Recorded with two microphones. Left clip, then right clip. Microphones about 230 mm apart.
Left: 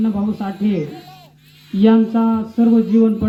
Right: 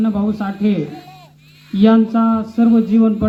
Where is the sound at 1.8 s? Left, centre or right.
Right.